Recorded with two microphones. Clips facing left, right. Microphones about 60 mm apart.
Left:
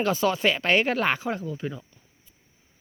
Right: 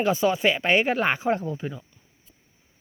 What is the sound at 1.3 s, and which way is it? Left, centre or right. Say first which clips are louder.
Speech: right 5 dB; right.